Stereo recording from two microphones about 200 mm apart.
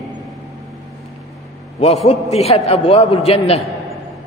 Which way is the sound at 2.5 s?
30° left (ahead or behind).